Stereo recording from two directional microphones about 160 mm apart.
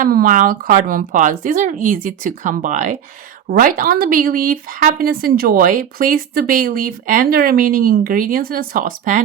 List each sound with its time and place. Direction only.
0.0 s speech: 60° right (ahead or behind)